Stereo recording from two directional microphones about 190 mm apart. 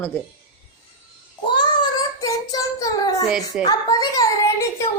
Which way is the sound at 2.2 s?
20° left (ahead or behind).